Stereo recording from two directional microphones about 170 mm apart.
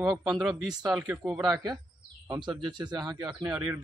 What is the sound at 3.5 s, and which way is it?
Speech, 10° right (ahead or behind).